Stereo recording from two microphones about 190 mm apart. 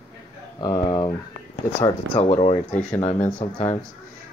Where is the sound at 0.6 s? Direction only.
20° left (ahead or behind).